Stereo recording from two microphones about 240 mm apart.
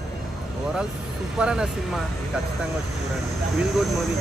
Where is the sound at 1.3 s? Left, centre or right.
Centre.